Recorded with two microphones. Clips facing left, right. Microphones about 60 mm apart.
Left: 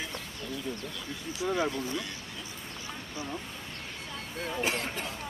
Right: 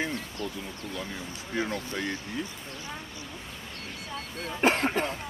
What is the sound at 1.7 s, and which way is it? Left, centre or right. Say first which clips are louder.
Speech: right 2 dB; right.